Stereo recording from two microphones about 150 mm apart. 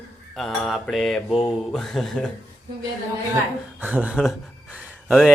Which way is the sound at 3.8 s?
10° right (ahead or behind).